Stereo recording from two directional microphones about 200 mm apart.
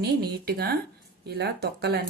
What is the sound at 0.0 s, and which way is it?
Speech, 55° right (ahead or behind).